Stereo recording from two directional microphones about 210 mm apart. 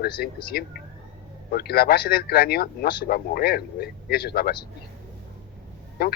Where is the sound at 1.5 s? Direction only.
45° left (ahead or behind).